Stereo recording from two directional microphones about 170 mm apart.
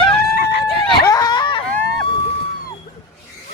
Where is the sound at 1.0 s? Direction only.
20° left (ahead or behind).